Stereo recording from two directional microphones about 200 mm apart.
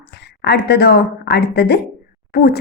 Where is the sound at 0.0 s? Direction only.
55° left (ahead or behind).